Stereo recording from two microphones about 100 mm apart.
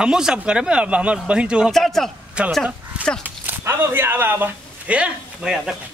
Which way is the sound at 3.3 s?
25° right (ahead or behind).